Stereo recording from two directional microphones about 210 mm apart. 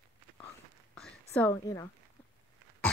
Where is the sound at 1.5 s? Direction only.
15° left (ahead or behind).